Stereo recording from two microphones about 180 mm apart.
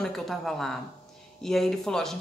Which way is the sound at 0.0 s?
Centre (ahead or behind).